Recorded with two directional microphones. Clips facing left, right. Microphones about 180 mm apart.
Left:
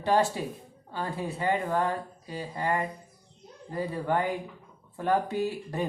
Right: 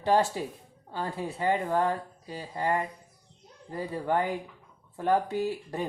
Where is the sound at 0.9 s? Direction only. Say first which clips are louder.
Even; 30° right (ahead or behind).